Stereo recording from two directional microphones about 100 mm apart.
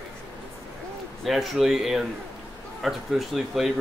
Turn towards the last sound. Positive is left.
turn(degrees=0)  # may be behind; listen again after turning